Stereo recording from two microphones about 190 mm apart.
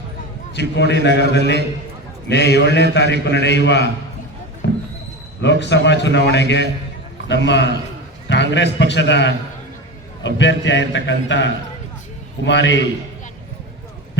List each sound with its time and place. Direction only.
0.8 s a man's voice: 65° left (ahead or behind)
5.4 s a man's voice: 65° left (ahead or behind)